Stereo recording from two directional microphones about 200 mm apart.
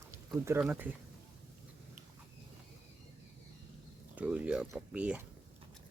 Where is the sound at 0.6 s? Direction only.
10° right (ahead or behind).